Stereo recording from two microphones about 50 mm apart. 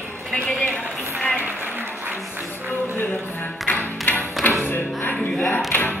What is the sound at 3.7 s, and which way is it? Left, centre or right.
Music, left.